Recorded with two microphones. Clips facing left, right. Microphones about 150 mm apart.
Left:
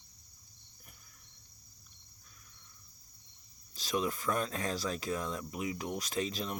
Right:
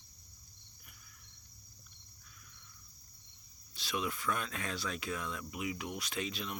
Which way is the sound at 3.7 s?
40° left (ahead or behind).